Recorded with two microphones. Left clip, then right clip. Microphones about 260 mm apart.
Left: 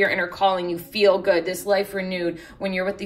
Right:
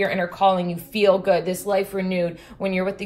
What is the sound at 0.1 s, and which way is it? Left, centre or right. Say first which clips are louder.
A woman's voice: right 1 dB; left.